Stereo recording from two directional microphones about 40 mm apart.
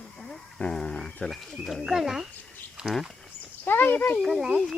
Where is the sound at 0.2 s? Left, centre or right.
Left.